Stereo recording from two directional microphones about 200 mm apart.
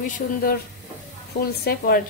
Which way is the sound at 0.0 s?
50° left (ahead or behind).